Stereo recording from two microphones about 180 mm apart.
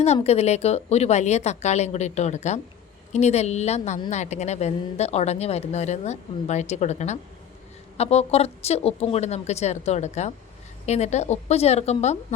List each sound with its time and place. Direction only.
0.0 s speech: 35° left (ahead or behind)